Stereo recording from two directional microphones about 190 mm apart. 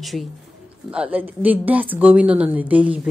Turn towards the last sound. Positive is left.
turn(degrees=-5)  # may be behind; listen again after turning